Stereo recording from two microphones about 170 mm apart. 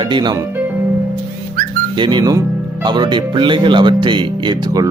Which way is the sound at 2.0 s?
25° right (ahead or behind).